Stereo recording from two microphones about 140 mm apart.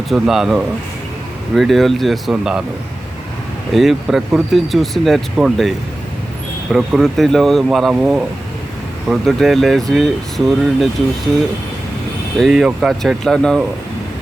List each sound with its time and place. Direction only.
0.1 s speech: centre (ahead or behind)
3.7 s speech: centre (ahead or behind)
6.7 s speech: centre (ahead or behind)
12.4 s speech: 5° right (ahead or behind)